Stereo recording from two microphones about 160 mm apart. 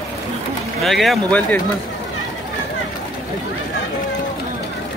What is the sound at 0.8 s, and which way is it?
Speech, centre (ahead or behind).